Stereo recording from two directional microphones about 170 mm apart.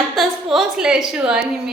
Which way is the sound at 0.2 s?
Centre (ahead or behind).